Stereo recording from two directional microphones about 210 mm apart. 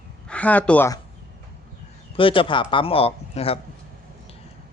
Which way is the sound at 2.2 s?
25° left (ahead or behind).